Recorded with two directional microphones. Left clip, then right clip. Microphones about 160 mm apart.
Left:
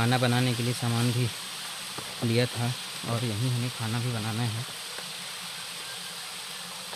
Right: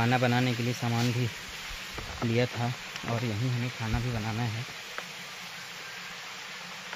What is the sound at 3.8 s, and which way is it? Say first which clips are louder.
Speech: left 1 dB; 5° left (ahead or behind).